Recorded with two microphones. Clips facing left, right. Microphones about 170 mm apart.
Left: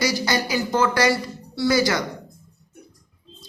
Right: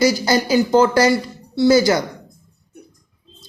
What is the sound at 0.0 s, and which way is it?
Speech, 25° right (ahead or behind).